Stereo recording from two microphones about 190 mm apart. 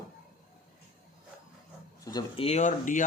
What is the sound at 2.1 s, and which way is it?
Speech, 20° left (ahead or behind).